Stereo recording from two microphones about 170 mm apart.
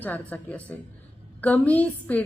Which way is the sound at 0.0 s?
10° left (ahead or behind).